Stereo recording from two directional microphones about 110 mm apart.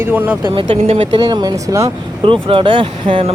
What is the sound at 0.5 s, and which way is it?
Speech, 60° right (ahead or behind).